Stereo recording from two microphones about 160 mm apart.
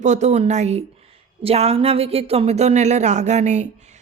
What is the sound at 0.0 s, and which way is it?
Speech, 45° right (ahead or behind).